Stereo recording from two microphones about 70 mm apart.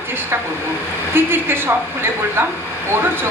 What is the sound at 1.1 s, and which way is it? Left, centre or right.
A woman's voice, right.